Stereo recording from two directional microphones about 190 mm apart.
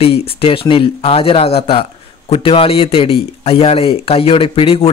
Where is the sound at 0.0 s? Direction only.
30° left (ahead or behind).